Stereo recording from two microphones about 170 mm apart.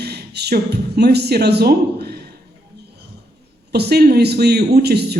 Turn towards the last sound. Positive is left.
turn(degrees=-75)  # may be behind; listen again after turning